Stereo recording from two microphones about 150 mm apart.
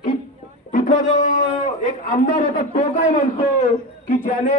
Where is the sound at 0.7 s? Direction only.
55° left (ahead or behind).